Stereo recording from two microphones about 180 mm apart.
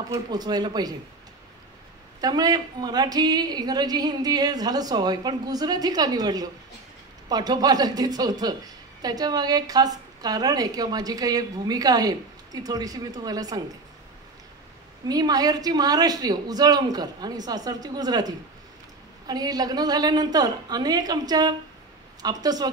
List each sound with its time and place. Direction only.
0.1 s a woman's voice: 20° right (ahead or behind)
2.2 s a woman's voice: 20° right (ahead or behind)
15.0 s a woman's voice: 20° right (ahead or behind)